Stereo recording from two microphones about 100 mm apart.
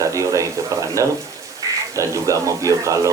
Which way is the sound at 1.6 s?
35° right (ahead or behind).